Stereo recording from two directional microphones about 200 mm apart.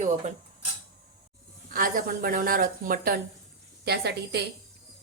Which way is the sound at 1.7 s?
45° right (ahead or behind).